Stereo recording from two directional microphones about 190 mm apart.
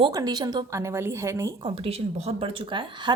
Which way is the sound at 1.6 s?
30° right (ahead or behind).